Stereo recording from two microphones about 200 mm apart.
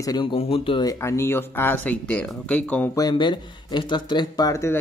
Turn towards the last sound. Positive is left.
turn(degrees=15)  # may be behind; listen again after turning